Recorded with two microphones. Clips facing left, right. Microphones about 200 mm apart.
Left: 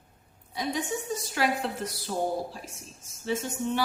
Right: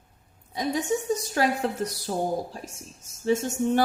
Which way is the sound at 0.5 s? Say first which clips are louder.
Right 5 dB; 45° right (ahead or behind).